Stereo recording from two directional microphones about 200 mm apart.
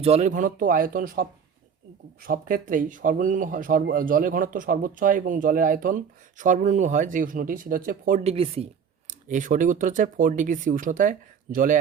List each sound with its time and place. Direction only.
0.0 s speech: 35° right (ahead or behind)